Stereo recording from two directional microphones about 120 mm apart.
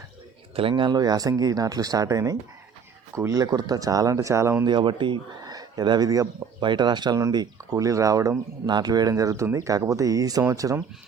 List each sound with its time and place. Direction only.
0.5 s speech: 45° right (ahead or behind); by 4.6 s 25° right (ahead or behind)
4.6 s speech: 40° right (ahead or behind)